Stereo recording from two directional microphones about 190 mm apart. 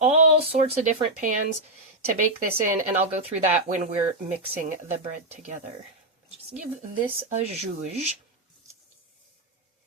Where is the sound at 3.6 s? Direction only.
45° right (ahead or behind).